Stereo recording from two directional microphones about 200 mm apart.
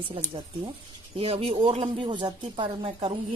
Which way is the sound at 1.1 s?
30° right (ahead or behind).